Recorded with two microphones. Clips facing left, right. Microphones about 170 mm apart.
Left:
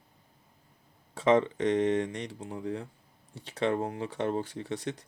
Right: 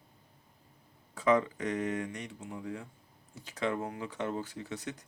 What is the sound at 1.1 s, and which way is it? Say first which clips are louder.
Speech: left 3 dB; 25° left (ahead or behind).